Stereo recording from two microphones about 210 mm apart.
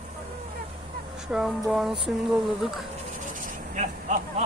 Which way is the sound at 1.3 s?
Centre (ahead or behind).